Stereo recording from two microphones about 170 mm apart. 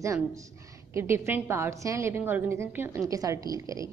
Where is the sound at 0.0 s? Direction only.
20° right (ahead or behind).